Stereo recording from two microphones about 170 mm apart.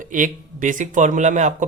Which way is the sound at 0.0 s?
50° right (ahead or behind).